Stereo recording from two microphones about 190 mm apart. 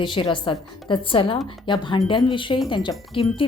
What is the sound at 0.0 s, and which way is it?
A woman's voice, 25° left (ahead or behind).